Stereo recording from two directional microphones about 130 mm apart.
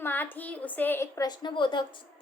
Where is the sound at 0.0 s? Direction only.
15° left (ahead or behind).